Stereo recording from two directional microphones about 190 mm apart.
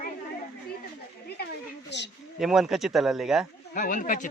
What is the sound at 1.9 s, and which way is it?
Speech, 65° left (ahead or behind).